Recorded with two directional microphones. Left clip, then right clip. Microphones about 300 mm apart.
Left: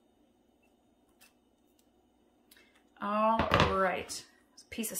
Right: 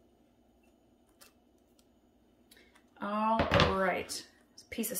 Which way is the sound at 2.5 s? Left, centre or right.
Centre.